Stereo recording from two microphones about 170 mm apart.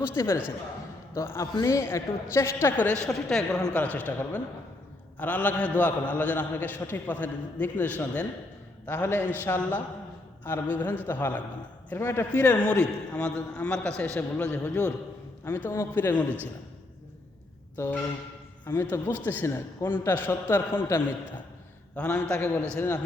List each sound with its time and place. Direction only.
0.1 s a man's voice: 15° left (ahead or behind)
17.7 s a man's voice: 10° left (ahead or behind)